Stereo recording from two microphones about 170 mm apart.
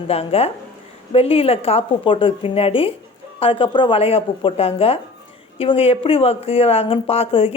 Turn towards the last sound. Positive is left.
turn(degrees=35)  # may be behind; listen again after turning